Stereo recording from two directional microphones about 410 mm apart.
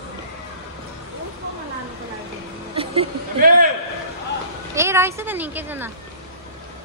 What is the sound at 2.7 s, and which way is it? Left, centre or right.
Speech, centre.